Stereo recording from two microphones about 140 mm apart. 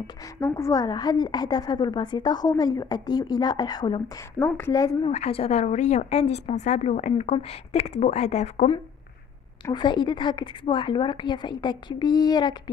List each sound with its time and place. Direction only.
0.4 s a woman's voice: 20° left (ahead or behind)
4.6 s a woman's voice: 20° left (ahead or behind)
5.0 s speech: 45° left (ahead or behind)
9.7 s a woman's voice: 35° left (ahead or behind)